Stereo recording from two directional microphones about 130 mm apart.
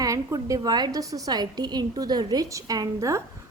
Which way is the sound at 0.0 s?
25° right (ahead or behind).